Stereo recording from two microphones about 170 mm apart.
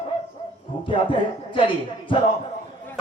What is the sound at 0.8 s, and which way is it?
A man's voice, 30° left (ahead or behind).